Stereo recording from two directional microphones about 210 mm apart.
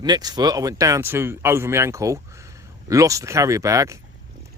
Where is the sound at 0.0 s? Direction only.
20° right (ahead or behind).